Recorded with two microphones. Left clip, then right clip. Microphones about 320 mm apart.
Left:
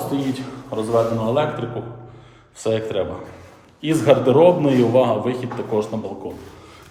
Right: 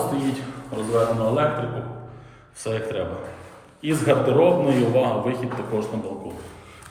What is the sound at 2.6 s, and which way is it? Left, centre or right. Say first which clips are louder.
A man's voice: left 5 dB; centre.